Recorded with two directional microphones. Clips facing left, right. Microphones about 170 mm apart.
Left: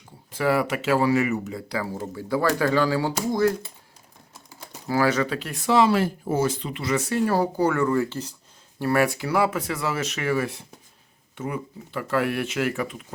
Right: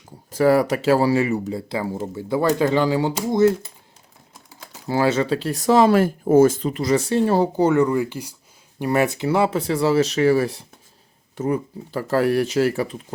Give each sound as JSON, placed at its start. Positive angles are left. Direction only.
{"t": 0.3, "sound": "speech", "side_deg": -40}
{"t": 4.9, "sound": "speech", "side_deg": -25}